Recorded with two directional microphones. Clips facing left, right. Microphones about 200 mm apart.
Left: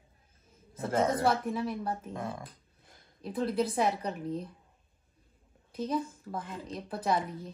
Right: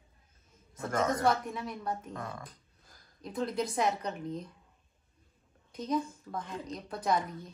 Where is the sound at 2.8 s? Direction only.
25° left (ahead or behind).